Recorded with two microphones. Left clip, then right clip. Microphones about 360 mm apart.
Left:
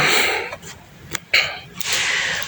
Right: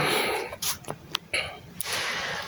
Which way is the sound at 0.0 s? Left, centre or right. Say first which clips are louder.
Left 8 dB; right.